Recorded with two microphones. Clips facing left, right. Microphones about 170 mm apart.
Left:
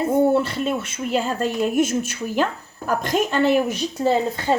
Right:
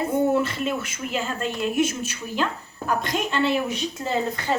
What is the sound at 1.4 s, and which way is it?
Speech, 45° left (ahead or behind).